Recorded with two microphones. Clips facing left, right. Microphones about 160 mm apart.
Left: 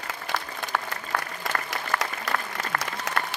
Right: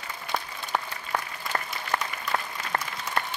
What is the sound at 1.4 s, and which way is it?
Applause, 90° left.